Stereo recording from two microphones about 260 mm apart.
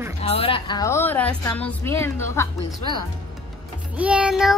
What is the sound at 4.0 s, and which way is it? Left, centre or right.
Child singing, centre.